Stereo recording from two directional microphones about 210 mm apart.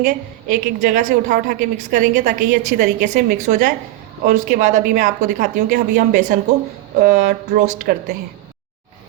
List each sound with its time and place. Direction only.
0.0 s a woman's voice: 40° right (ahead or behind)